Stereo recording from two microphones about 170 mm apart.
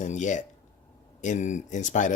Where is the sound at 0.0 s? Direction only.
45° left (ahead or behind).